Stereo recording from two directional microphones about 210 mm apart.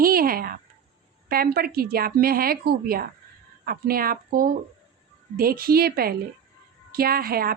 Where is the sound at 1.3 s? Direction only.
45° right (ahead or behind).